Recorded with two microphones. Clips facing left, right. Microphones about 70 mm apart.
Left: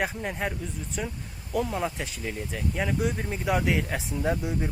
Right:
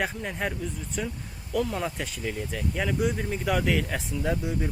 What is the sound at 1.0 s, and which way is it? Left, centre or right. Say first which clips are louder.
Speech: right 1 dB; centre.